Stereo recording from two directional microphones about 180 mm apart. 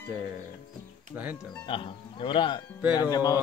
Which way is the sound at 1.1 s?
10° right (ahead or behind).